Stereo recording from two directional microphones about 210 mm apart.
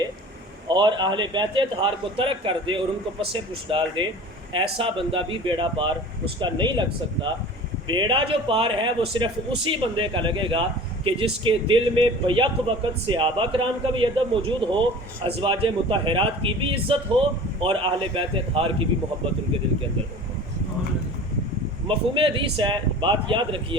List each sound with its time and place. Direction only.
0.7 s a man's voice: 20° right (ahead or behind)
21.8 s a man's voice: 25° right (ahead or behind)